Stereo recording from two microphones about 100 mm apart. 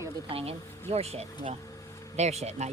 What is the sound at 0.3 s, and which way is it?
Speech, 75° right (ahead or behind).